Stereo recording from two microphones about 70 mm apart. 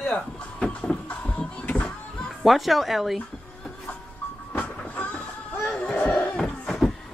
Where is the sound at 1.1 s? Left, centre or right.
Centre.